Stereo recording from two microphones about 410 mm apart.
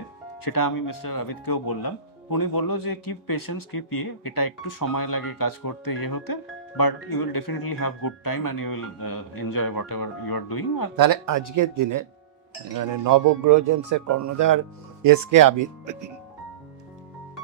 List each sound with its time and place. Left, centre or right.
0.4 s speech: left
11.0 s speech: right